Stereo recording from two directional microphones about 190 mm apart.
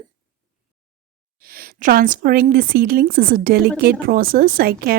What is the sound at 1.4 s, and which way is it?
Speech, 50° right (ahead or behind).